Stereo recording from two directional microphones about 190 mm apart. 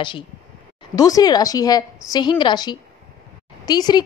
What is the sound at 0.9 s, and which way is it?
A woman's voice, 20° left (ahead or behind).